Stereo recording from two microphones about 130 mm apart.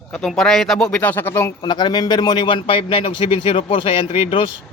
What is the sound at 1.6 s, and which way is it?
Speech, 35° left (ahead or behind).